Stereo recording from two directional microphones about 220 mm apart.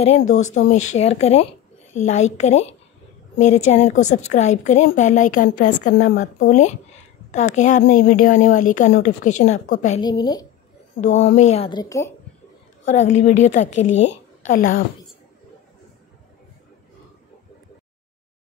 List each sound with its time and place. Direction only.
0.2 s speech: 70° left (ahead or behind)
0.6 s a woman's voice: 30° left (ahead or behind)
9.9 s a woman's voice: 20° left (ahead or behind)
11.0 s a woman's voice: 30° left (ahead or behind); by 12.1 s 15° left (ahead or behind)
12.8 s a woman's voice: 30° left (ahead or behind)